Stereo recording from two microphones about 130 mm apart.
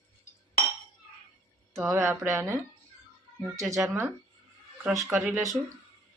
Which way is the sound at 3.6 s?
25° right (ahead or behind).